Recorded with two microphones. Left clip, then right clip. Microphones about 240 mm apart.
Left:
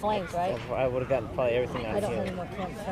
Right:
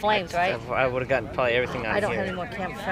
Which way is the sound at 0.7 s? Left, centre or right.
Right.